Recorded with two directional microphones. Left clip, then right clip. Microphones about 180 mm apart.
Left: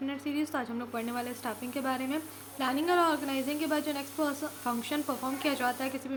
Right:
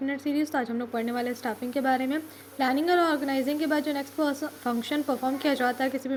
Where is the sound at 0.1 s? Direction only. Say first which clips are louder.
Right 6 dB; 20° right (ahead or behind).